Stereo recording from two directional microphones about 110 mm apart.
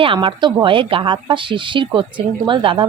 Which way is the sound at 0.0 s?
50° right (ahead or behind).